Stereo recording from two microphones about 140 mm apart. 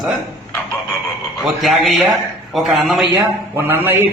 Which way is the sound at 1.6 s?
Centre (ahead or behind).